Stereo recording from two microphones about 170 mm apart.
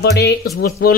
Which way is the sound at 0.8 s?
60° left (ahead or behind).